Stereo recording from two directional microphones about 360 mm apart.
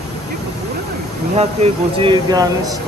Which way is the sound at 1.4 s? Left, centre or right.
Centre.